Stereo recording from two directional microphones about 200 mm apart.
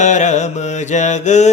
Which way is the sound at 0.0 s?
35° left (ahead or behind).